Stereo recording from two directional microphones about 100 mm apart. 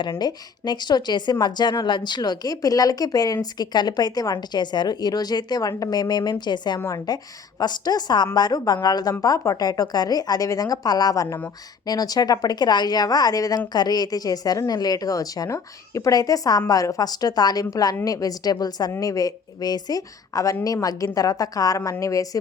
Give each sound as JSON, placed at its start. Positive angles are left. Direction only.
{"t": 0.0, "sound": "speech", "side_deg": 50}
{"t": 6.7, "sound": "speech", "side_deg": 35}